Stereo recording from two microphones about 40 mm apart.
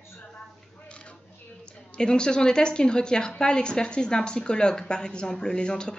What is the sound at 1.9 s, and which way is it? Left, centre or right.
Speech, left.